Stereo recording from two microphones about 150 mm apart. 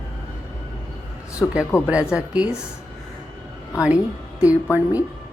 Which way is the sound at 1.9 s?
10° right (ahead or behind).